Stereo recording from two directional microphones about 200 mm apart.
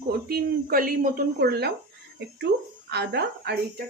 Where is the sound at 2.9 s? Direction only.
55° right (ahead or behind).